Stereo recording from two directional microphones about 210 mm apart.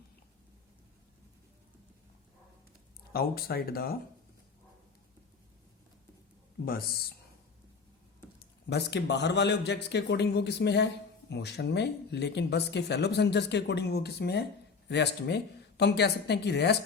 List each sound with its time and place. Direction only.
3.1 s speech: 45° left (ahead or behind)
8.6 s speech: 55° left (ahead or behind)